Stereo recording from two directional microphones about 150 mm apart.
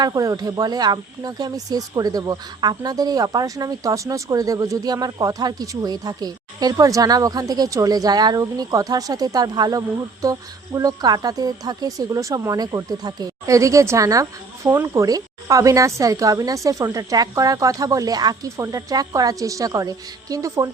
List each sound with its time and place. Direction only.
0.0 s speech: 25° right (ahead or behind)